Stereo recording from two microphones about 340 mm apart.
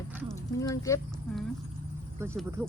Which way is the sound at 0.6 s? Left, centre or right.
Centre.